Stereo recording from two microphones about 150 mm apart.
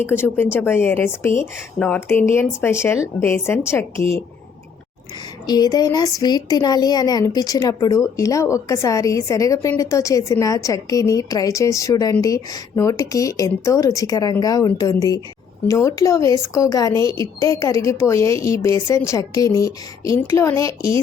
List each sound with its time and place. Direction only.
0.3 s speech: 15° left (ahead or behind)
5.5 s a woman's voice: 25° left (ahead or behind)